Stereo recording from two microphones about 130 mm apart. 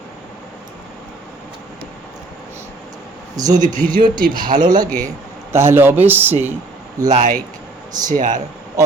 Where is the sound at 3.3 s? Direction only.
30° right (ahead or behind).